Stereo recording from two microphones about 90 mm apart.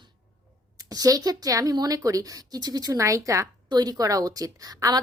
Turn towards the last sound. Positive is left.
turn(degrees=-45)  # may be behind; listen again after turning